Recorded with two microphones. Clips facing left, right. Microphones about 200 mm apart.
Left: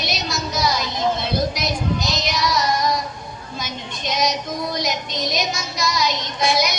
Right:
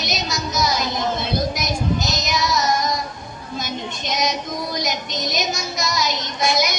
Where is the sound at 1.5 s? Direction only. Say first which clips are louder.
Right 1 dB; 45° right (ahead or behind).